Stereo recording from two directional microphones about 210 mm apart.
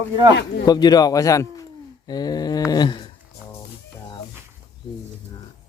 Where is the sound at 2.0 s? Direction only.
20° left (ahead or behind).